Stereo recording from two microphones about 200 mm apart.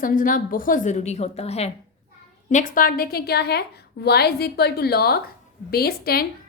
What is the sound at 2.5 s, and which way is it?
A woman's voice, 40° left (ahead or behind).